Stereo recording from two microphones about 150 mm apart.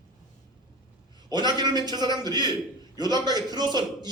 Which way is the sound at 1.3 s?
30° right (ahead or behind).